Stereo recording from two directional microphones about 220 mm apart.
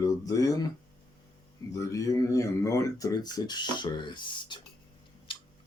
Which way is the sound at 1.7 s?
15° left (ahead or behind).